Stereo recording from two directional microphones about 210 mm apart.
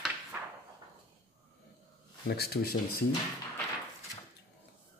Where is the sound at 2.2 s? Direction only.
50° left (ahead or behind).